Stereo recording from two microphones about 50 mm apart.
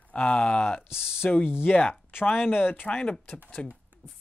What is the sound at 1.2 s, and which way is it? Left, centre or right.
Speech, left.